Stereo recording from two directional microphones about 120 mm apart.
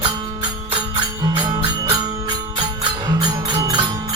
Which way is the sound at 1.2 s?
40° right (ahead or behind).